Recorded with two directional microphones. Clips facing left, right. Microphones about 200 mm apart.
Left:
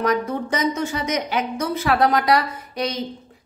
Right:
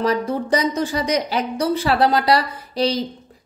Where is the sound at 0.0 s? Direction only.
30° right (ahead or behind).